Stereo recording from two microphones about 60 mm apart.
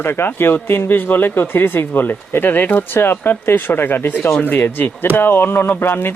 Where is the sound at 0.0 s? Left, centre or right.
Left.